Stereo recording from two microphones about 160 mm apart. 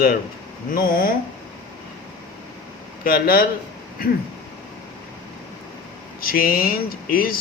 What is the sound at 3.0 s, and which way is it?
Speech, 65° left (ahead or behind).